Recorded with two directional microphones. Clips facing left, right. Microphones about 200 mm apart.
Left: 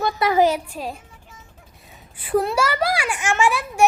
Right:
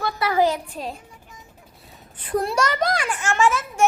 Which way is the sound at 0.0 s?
20° left (ahead or behind).